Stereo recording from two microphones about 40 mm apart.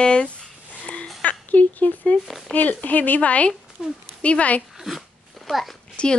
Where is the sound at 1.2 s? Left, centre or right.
Left.